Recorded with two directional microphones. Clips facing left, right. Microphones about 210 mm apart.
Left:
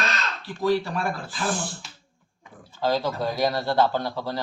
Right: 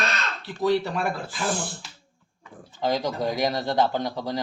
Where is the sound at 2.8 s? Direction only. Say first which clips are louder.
Even; 15° right (ahead or behind).